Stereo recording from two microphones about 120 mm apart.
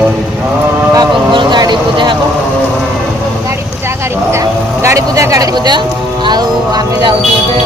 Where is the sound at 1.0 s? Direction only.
40° right (ahead or behind).